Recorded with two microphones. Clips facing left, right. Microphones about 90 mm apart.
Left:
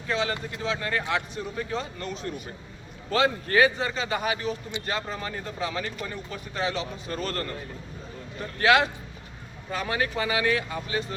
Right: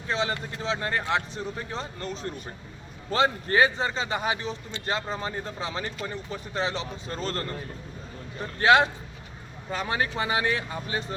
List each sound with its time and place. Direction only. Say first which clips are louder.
0.1 s a man's voice: even; 30° right (ahead or behind)
8.5 s a man's voice: right 1 dB; 30° right (ahead or behind)